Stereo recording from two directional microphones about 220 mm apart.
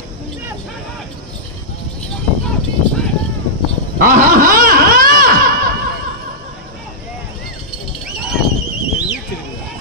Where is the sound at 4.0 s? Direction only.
40° right (ahead or behind).